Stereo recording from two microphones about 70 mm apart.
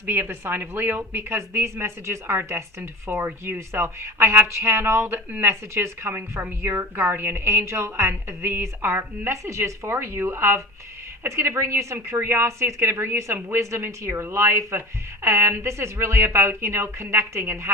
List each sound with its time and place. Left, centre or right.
0.0 s speech: right